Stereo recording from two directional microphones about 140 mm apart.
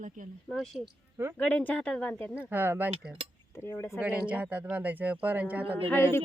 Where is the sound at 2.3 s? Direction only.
10° right (ahead or behind).